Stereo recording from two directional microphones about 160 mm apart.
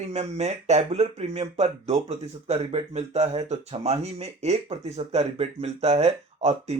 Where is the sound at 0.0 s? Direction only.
45° right (ahead or behind).